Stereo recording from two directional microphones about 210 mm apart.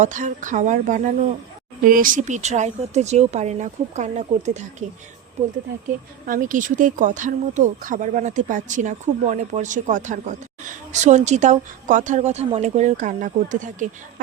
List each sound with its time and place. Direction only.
0.0 s speech: 35° right (ahead or behind)
6.2 s speech: 40° right (ahead or behind)